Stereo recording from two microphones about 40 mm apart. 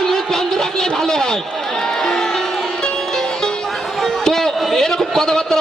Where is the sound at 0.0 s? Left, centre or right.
Centre.